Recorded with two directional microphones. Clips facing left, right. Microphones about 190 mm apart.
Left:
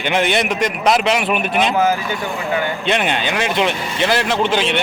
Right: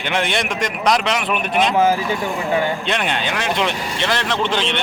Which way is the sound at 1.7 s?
30° right (ahead or behind).